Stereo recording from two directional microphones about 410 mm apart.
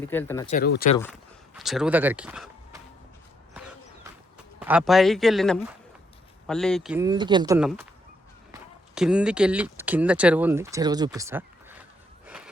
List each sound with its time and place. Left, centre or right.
0.0 s speech: centre
0.5 s speech: left
1.5 s speech: centre
4.6 s speech: centre
9.0 s speech: centre